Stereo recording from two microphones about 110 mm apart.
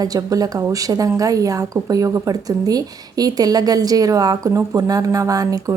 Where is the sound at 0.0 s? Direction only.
35° right (ahead or behind).